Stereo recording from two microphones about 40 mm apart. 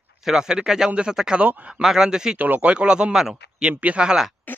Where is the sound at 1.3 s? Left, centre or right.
Right.